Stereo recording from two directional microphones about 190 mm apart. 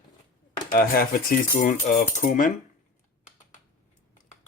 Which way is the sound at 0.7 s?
50° left (ahead or behind).